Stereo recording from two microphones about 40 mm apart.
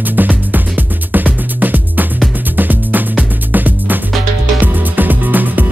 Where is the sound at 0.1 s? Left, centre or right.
Right.